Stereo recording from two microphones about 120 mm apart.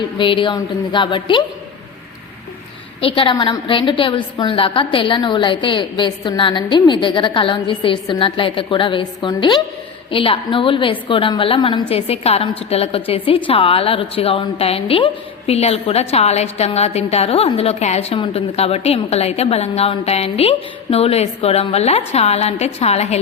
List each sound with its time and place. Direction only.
0.2 s a woman's voice: 45° left (ahead or behind)
3.0 s a woman's voice: 45° left (ahead or behind)
10.1 s a woman's voice: 50° left (ahead or behind)